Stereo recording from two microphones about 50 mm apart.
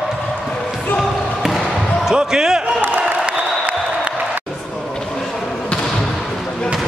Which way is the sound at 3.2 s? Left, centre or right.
Right.